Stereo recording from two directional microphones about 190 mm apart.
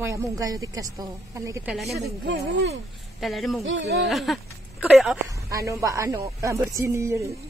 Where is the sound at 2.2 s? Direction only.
70° right (ahead or behind).